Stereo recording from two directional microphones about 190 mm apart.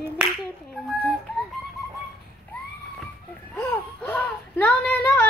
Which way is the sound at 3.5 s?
10° left (ahead or behind).